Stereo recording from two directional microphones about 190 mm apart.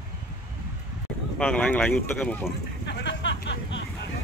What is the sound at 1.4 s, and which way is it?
Speech, 5° left (ahead or behind).